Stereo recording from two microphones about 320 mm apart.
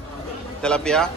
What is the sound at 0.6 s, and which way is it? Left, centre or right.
Speech, centre.